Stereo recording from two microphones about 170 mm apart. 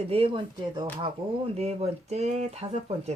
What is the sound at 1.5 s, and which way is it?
Speech, 40° right (ahead or behind).